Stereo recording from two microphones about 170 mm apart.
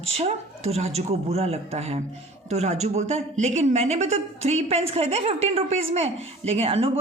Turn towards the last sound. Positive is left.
turn(degrees=-35)  # may be behind; listen again after turning